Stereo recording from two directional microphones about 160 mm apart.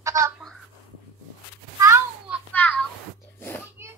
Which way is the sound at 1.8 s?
15° right (ahead or behind).